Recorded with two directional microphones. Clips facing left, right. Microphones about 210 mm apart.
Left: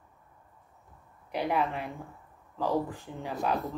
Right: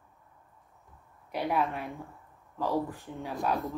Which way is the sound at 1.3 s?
Centre (ahead or behind).